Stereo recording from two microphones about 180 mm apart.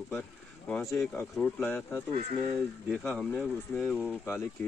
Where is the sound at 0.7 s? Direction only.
10° left (ahead or behind).